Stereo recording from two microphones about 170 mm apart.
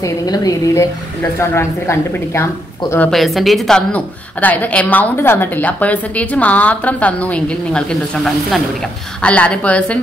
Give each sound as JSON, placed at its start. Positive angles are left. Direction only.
{"t": 0.0, "sound": "a woman's voice", "side_deg": 20}
{"t": 3.0, "sound": "a woman's voice", "side_deg": 0}